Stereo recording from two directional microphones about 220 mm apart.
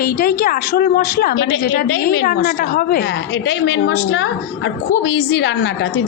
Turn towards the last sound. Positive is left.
turn(degrees=50)  # may be behind; listen again after turning